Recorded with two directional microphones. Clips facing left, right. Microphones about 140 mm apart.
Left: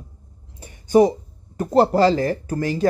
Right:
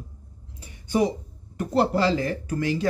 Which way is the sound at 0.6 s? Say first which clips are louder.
Left 8 dB; 45° left (ahead or behind).